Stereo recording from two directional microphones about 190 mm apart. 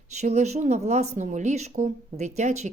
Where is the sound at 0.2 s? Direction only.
35° right (ahead or behind).